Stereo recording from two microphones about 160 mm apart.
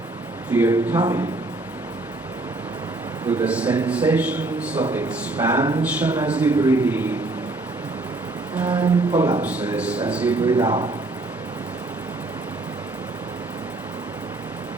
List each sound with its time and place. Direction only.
0.5 s a man's voice: 10° right (ahead or behind)
3.2 s a man's voice: 10° right (ahead or behind)
8.5 s a man's voice: 10° right (ahead or behind)
10.5 s speech: 30° right (ahead or behind)